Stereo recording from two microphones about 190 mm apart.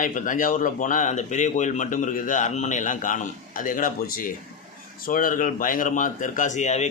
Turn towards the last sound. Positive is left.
turn(degrees=35)  # may be behind; listen again after turning